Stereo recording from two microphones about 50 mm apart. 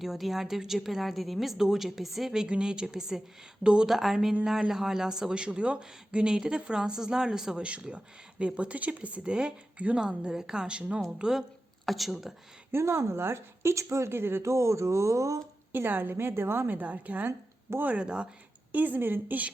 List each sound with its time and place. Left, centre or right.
0.0 s speech: centre
2.4 s speech: centre
3.8 s speech: centre; by 11.0 s right
11.2 s speech: centre
12.7 s speech: right
14.1 s a woman's voice: right
14.4 s speech: right
15.7 s a woman's voice: right
17.2 s a sound: right
17.8 s speech: right
18.7 s a woman's voice: right